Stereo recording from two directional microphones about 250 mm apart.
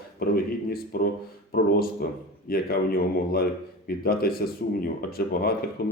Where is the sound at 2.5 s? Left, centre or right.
Left.